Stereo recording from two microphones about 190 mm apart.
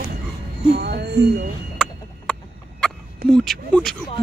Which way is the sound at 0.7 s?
55° right (ahead or behind).